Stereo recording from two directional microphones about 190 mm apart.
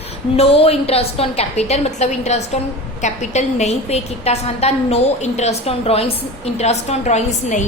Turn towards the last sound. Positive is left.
turn(degrees=40)  # may be behind; listen again after turning